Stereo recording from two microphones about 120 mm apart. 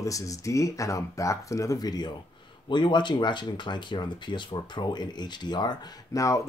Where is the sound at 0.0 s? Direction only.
25° left (ahead or behind).